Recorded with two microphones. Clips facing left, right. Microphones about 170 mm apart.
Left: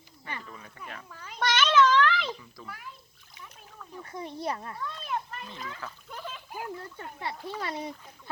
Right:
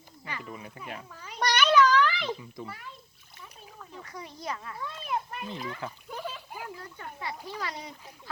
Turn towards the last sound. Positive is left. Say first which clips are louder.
# left 1 dB
turn(degrees=30)  # may be behind; listen again after turning